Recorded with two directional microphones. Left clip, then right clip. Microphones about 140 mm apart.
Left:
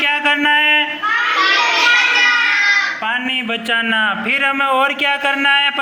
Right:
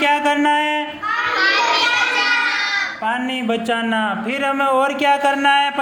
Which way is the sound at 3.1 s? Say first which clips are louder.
Left 2 dB; 20° right (ahead or behind).